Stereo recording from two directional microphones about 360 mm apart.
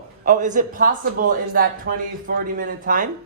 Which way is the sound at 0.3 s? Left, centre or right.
Right.